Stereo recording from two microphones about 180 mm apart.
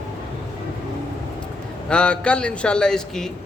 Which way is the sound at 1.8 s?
5° left (ahead or behind).